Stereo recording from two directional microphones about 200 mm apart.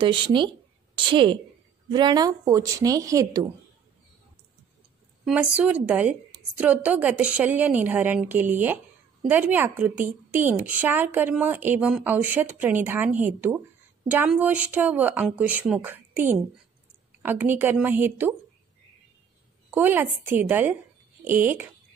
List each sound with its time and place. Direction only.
0.0 s a woman's voice: 25° right (ahead or behind)
5.2 s a woman's voice: 5° right (ahead or behind)
19.7 s a woman's voice: 10° right (ahead or behind)